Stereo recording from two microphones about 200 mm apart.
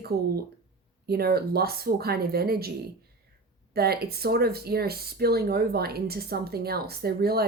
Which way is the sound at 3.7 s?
50° right (ahead or behind).